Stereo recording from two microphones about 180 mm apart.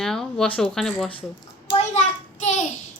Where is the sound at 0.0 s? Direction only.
5° left (ahead or behind).